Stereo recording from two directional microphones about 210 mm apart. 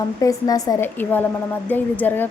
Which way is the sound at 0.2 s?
15° left (ahead or behind).